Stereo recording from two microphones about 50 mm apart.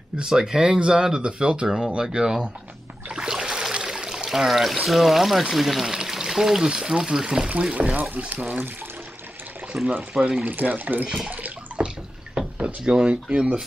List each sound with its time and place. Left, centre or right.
0.2 s speech: centre
3.1 s a sound: centre
4.8 s speech: centre
5.9 s speech: centre
7.7 s speech: right
9.7 s speech: right
10.4 s speech: right
11.2 s bathtub: right
12.4 s speech: centre